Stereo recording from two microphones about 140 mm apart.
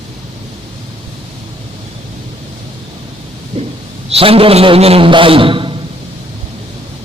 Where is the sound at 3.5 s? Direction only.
45° right (ahead or behind).